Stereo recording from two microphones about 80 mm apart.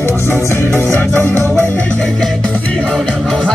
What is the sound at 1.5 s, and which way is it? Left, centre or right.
Music, centre.